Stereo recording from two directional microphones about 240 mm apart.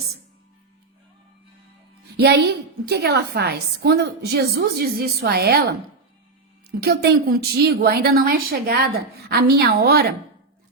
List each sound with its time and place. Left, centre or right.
2.0 s a woman's voice: right